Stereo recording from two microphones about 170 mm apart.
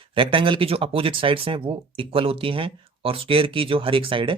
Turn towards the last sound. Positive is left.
turn(degrees=-30)  # may be behind; listen again after turning